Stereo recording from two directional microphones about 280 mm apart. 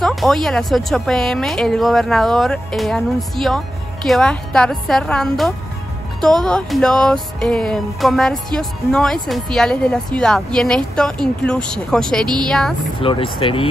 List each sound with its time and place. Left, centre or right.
0.0 s music: centre
13.0 s speech: centre